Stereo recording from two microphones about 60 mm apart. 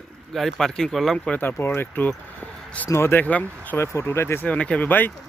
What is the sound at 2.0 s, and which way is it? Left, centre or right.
Vehicle, left.